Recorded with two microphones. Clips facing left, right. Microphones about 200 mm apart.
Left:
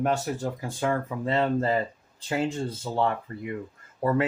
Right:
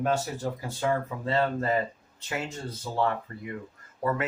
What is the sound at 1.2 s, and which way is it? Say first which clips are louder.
Speech: left 4 dB; 20° left (ahead or behind).